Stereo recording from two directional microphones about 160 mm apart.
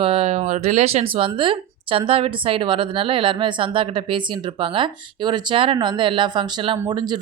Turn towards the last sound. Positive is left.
turn(degrees=-25)  # may be behind; listen again after turning